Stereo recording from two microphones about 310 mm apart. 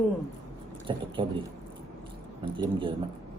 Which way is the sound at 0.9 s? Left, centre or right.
Centre.